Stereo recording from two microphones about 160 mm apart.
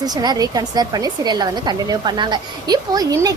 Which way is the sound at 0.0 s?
25° right (ahead or behind).